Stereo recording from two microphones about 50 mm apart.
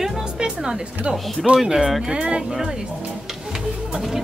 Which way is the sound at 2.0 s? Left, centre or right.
Centre.